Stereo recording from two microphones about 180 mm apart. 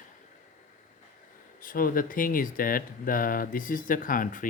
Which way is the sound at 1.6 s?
50° left (ahead or behind).